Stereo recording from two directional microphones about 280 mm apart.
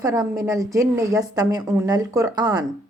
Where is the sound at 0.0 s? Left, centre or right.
Centre.